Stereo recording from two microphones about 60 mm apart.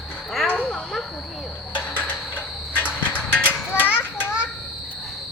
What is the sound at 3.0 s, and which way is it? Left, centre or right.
Children playing, left.